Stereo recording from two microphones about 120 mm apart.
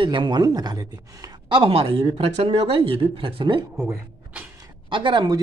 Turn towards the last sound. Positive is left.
turn(degrees=-35)  # may be behind; listen again after turning